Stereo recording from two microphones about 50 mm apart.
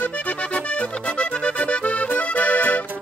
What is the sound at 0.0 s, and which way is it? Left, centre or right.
Music, left.